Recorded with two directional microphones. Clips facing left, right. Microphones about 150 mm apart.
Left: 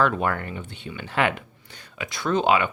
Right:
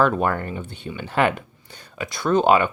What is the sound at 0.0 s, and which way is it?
Speech, 40° right (ahead or behind).